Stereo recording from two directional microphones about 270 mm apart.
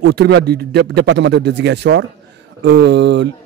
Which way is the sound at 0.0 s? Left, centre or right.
Right.